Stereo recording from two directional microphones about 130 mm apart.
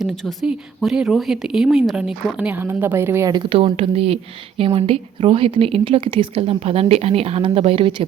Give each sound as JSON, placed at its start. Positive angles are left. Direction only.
{"t": 0.0, "sound": "speech", "side_deg": 0}
{"t": 3.3, "sound": "a woman's voice", "side_deg": -45}